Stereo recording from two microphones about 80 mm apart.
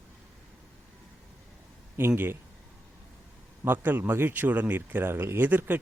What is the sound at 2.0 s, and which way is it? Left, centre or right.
Speech, right.